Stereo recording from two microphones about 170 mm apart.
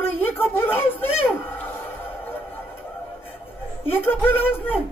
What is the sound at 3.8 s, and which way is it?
Speech, 10° left (ahead or behind).